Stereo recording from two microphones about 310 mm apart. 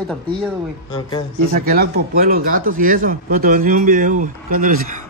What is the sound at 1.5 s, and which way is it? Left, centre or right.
Speech, right.